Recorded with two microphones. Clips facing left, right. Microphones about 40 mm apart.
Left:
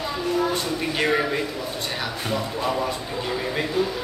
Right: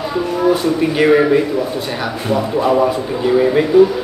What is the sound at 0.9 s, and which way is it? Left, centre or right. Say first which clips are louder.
Speech: right 11 dB; centre.